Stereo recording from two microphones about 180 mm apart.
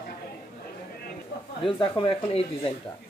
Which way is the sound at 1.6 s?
30° left (ahead or behind).